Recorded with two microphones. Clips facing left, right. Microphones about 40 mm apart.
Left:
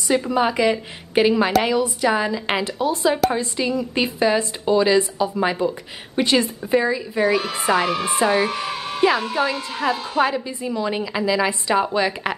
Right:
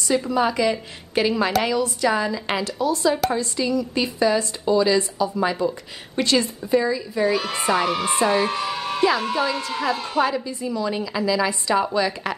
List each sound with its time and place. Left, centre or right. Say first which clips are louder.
0.1 s a woman's voice: left 2 dB; left